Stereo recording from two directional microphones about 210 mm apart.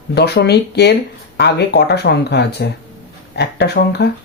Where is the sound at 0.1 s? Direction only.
50° left (ahead or behind).